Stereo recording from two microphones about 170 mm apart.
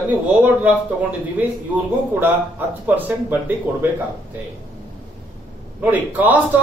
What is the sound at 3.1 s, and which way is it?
Speech, 10° right (ahead or behind).